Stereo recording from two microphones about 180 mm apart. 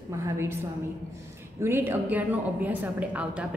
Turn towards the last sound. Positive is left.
turn(degrees=-10)  # may be behind; listen again after turning